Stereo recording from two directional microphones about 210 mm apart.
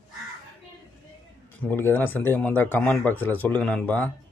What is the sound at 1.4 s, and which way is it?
Speech, 10° left (ahead or behind).